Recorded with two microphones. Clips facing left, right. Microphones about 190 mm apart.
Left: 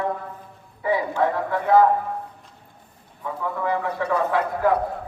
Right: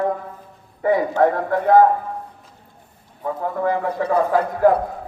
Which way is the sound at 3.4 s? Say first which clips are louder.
Right 3 dB; 45° right (ahead or behind).